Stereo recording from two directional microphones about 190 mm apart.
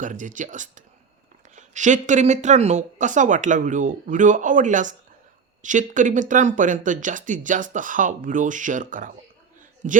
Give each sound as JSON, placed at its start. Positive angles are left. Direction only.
{"t": 0.0, "sound": "speech", "side_deg": -40}